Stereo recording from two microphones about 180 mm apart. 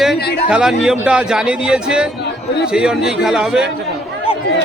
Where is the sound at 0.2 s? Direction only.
65° left (ahead or behind).